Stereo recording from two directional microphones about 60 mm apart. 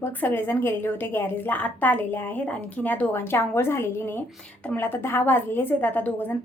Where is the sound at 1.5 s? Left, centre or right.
Left.